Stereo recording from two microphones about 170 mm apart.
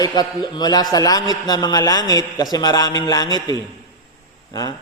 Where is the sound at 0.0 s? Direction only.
25° left (ahead or behind).